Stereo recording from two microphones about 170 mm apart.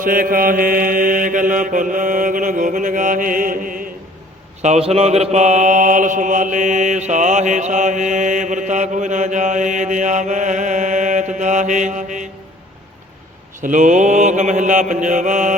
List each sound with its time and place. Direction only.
0.0 s mantra: 55° right (ahead or behind)
4.6 s mantra: 40° right (ahead or behind)
13.6 s mantra: 45° right (ahead or behind)